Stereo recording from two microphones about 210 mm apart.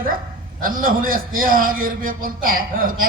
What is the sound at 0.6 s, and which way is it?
A man's voice, 40° right (ahead or behind).